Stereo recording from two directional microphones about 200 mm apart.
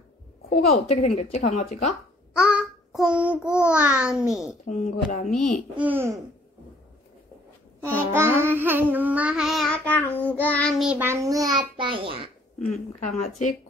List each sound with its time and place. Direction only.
0.5 s speech: 35° left (ahead or behind)
2.3 s a child's voice: 5° right (ahead or behind)
4.6 s speech: 40° left (ahead or behind)
5.8 s child singing: 10° right (ahead or behind)
7.8 s child singing: 10° right (ahead or behind)
11.7 s a child's voice: 25° right (ahead or behind)
12.5 s a woman's voice: centre (ahead or behind)